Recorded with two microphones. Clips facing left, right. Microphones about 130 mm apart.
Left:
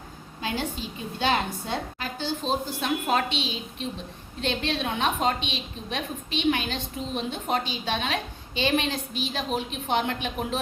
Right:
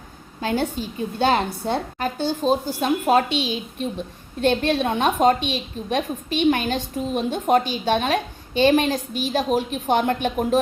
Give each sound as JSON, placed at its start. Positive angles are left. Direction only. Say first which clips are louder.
{"t": 0.4, "sound": "a woman's voice", "louder": "right 7 dB", "side_deg": -45}